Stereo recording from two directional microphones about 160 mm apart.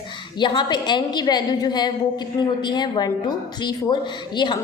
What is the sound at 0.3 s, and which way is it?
A woman's voice, 30° left (ahead or behind).